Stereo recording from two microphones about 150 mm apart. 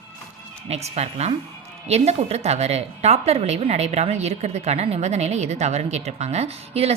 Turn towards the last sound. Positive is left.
turn(degrees=-45)  # may be behind; listen again after turning